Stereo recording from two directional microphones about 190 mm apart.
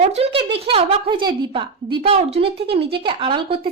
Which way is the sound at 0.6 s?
30° right (ahead or behind).